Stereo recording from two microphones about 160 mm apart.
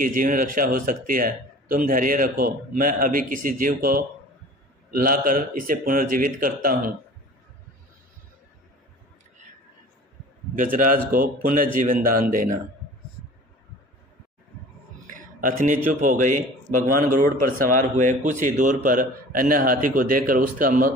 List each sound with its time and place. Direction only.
0.0 s speech: 60° right (ahead or behind)
10.5 s speech: 60° right (ahead or behind)
15.1 s speech: 60° right (ahead or behind)